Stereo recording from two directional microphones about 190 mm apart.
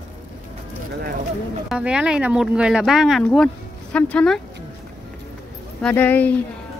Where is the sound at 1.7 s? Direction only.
5° right (ahead or behind).